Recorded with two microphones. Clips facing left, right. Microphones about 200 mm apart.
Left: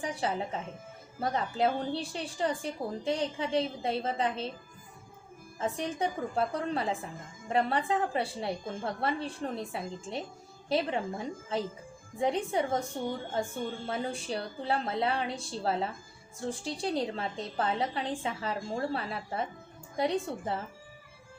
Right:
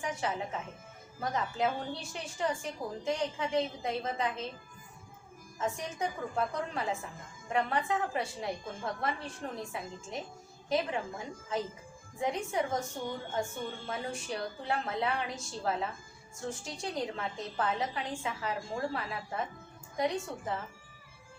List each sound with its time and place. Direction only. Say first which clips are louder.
0.0 s a woman's voice: left 2 dB; 30° left (ahead or behind)
5.5 s a woman's voice: left 3 dB; 35° left (ahead or behind)
12.2 s a woman's voice: left 3 dB; 30° left (ahead or behind)
13.8 s a woman's voice: left 3 dB; 30° left (ahead or behind)